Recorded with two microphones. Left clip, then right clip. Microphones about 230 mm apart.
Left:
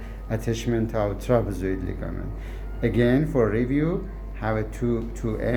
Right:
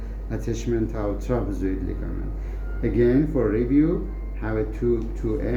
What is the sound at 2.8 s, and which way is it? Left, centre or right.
Speech, left.